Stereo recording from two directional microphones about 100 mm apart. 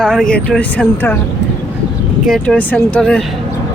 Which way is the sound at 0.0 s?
5° left (ahead or behind).